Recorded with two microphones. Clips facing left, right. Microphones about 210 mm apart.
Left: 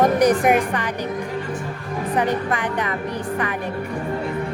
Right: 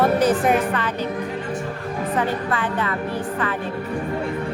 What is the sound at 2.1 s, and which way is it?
Speech, 15° left (ahead or behind).